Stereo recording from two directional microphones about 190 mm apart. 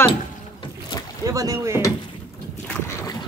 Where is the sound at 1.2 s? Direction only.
20° right (ahead or behind).